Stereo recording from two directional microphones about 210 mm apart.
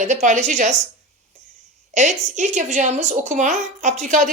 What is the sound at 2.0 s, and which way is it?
Speech, 35° right (ahead or behind).